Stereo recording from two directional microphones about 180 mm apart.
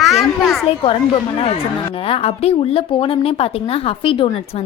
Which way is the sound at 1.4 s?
30° left (ahead or behind).